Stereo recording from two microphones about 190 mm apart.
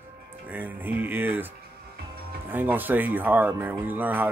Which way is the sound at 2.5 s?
10° right (ahead or behind).